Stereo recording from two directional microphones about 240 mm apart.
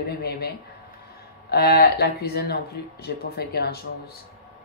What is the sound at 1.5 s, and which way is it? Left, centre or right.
Speech, left.